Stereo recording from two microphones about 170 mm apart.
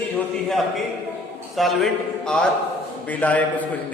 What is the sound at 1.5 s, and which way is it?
A man's voice, centre (ahead or behind).